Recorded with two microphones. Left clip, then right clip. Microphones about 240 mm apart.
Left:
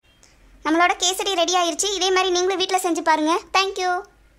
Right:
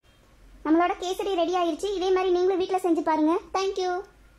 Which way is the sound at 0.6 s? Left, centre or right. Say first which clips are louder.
Left 5 dB; left.